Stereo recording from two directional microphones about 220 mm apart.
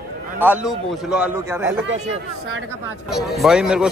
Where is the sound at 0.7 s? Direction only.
5° right (ahead or behind).